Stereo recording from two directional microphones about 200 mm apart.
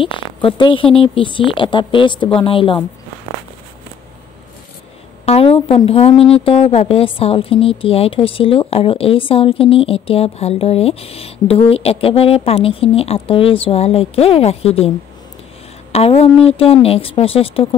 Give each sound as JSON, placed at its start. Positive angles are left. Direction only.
{"t": 0.0, "sound": "a woman's voice", "side_deg": 25}
{"t": 5.2, "sound": "a woman's voice", "side_deg": 30}
{"t": 15.9, "sound": "a woman's voice", "side_deg": 30}